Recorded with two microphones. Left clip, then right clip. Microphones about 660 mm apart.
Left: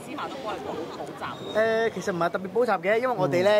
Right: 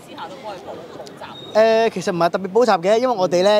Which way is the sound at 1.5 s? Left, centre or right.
Right.